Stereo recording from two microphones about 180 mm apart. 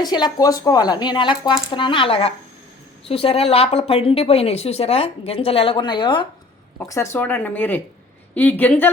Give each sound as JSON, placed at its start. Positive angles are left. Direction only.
{"t": 0.0, "sound": "speech", "side_deg": 20}